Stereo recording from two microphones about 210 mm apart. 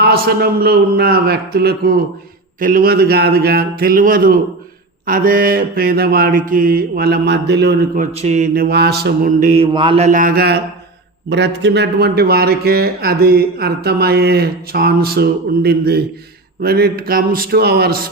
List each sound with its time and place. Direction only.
0.0 s a man's voice: 50° right (ahead or behind); by 9.6 s 35° right (ahead or behind)
9.7 s a man's voice: 25° right (ahead or behind); by 18.1 s 45° right (ahead or behind)